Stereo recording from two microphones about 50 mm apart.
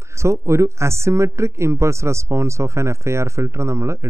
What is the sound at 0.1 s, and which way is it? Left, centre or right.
Speech, right.